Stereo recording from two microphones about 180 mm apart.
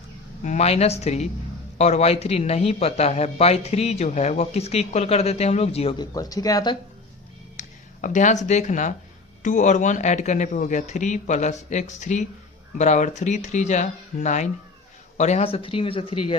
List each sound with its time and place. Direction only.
0.4 s speech: 40° left (ahead or behind)
6.0 s speech: 20° left (ahead or behind)
7.6 s music: 40° left (ahead or behind)
8.0 s speech: 45° left (ahead or behind)